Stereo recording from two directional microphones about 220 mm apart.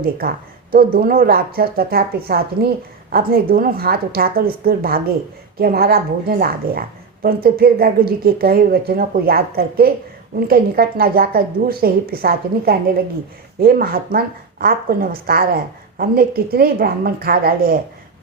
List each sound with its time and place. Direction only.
0.0 s a woman's voice: 45° right (ahead or behind)